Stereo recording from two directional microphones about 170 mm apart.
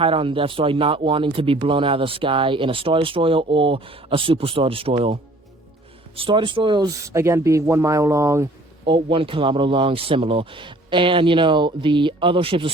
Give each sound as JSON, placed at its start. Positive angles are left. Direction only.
{"t": 0.0, "sound": "speech", "side_deg": -30}
{"t": 6.1, "sound": "speech", "side_deg": -30}
{"t": 8.8, "sound": "speech", "side_deg": -30}